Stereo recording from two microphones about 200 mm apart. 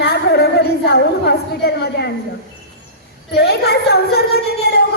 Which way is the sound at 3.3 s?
55° left (ahead or behind).